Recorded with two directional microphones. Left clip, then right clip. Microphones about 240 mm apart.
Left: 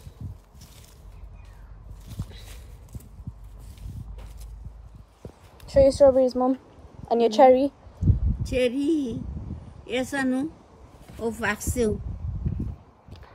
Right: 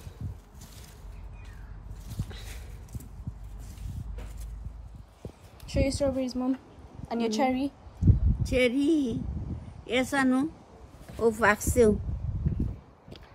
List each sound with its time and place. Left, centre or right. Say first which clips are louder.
5.2 s a sound: left 1 dB; centre
8.5 s speech: left 1 dB; centre
11.3 s speech: right 3 dB; centre